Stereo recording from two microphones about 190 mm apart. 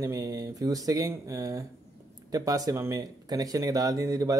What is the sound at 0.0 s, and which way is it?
Speech, 15° right (ahead or behind).